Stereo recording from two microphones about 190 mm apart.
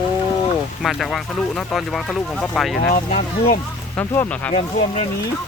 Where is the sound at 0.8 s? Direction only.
Centre (ahead or behind).